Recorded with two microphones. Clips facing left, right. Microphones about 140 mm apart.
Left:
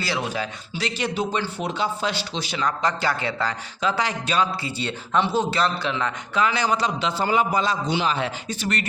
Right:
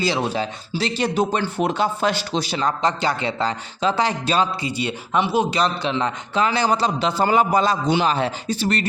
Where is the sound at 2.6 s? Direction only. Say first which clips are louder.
Right 1 dB; 25° right (ahead or behind).